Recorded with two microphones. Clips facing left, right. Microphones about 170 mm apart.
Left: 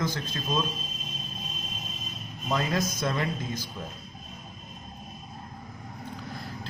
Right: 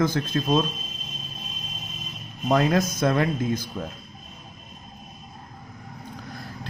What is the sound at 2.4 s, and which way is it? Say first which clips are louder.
A man's voice: right 7 dB; 55° right (ahead or behind).